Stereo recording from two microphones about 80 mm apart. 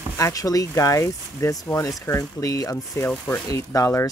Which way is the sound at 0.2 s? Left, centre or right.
Left.